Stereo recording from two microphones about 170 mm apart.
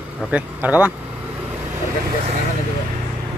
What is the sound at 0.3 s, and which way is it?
Speech, 10° right (ahead or behind).